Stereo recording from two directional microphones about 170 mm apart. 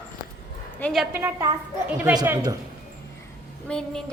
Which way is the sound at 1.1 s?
10° right (ahead or behind).